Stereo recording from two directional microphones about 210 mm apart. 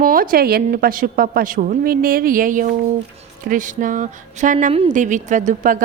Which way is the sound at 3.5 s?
40° right (ahead or behind).